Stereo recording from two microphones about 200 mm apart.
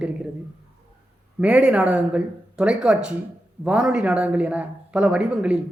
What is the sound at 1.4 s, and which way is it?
Speech, 5° right (ahead or behind).